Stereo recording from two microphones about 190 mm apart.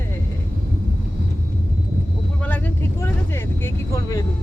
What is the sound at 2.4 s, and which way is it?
Vehicle, 10° left (ahead or behind).